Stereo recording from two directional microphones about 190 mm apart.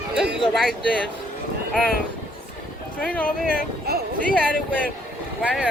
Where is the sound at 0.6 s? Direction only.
Centre (ahead or behind).